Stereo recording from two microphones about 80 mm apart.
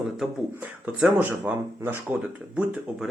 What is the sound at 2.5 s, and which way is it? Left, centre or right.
Speech, centre.